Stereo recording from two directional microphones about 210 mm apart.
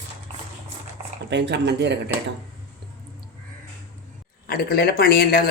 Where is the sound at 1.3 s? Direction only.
55° right (ahead or behind).